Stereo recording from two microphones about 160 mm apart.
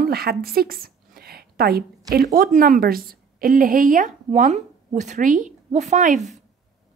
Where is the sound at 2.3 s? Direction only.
60° right (ahead or behind).